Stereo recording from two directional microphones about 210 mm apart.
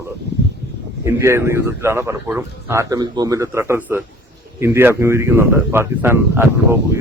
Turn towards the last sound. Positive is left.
turn(degrees=-10)  # may be behind; listen again after turning